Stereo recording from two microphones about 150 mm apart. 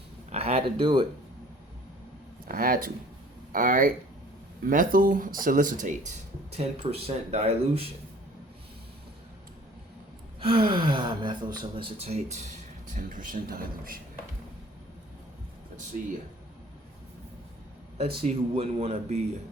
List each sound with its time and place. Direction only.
0.3 s speech: 45° right (ahead or behind)
2.5 s speech: 70° right (ahead or behind); by 7.9 s 40° right (ahead or behind)
10.4 s speech: 35° right (ahead or behind)
12.9 s speech: 65° right (ahead or behind)
18.2 s speech: 40° right (ahead or behind)